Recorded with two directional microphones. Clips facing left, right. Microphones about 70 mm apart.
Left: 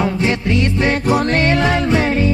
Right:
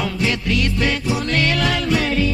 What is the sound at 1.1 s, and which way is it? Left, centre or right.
Music, left.